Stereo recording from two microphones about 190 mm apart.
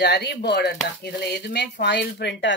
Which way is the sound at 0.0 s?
60° left (ahead or behind).